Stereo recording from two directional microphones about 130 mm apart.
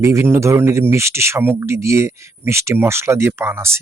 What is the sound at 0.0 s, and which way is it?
Speech, 20° right (ahead or behind).